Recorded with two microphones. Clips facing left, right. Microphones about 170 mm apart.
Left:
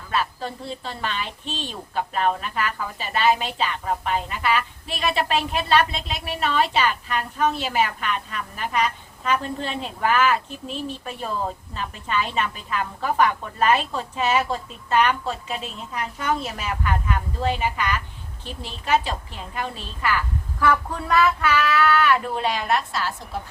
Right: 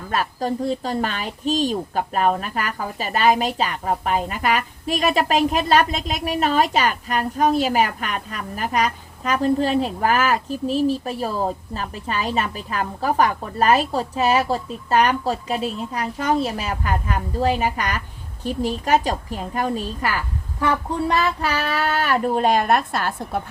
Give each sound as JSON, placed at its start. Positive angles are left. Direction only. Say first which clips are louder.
{"t": 0.1, "sound": "a woman's voice", "louder": "right 3 dB", "side_deg": -40}
{"t": 20.6, "sound": "speech", "louder": "right 1 dB", "side_deg": -25}